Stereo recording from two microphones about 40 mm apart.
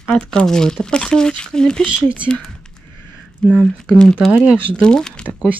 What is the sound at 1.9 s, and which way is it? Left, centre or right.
Speech, right.